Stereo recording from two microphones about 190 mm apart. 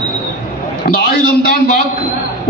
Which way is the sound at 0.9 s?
50° left (ahead or behind).